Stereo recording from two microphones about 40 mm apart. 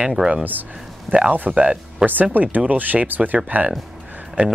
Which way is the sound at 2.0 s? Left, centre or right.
Right.